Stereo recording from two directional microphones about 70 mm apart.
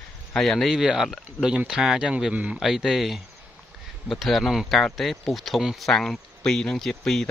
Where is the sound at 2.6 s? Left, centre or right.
Centre.